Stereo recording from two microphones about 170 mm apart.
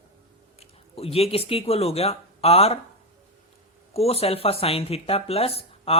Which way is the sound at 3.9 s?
35° left (ahead or behind).